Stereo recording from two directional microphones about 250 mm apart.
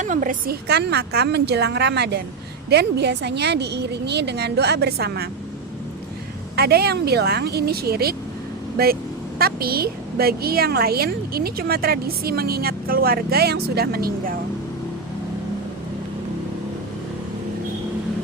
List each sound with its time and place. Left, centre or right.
0.0 s a woman's voice: right
6.6 s a woman's voice: right
9.4 s a woman's voice: right